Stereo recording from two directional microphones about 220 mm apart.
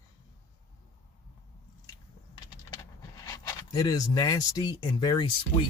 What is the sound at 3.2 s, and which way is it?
Speech, 15° left (ahead or behind).